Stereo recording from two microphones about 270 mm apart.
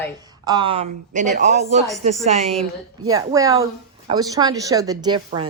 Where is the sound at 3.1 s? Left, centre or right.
Centre.